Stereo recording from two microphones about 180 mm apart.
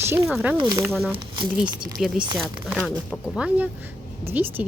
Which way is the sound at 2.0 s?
Centre (ahead or behind).